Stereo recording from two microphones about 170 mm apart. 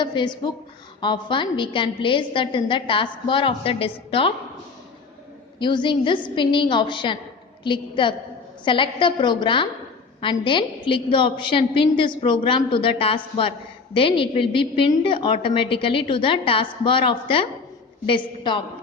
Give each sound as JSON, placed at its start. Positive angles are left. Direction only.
{"t": 0.0, "sound": "a woman's voice", "side_deg": 25}
{"t": 5.5, "sound": "a woman's voice", "side_deg": 30}